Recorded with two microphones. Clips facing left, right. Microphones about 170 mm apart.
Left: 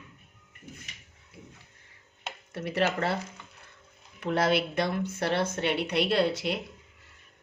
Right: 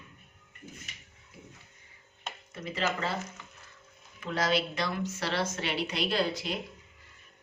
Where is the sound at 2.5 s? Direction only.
65° left (ahead or behind).